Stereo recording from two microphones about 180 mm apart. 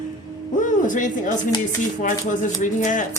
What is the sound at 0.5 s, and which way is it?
Hoot, 45° left (ahead or behind).